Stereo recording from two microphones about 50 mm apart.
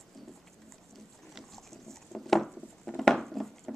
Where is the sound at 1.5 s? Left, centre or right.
Centre.